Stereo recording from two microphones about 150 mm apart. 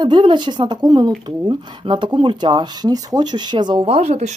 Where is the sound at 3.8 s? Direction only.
45° right (ahead or behind).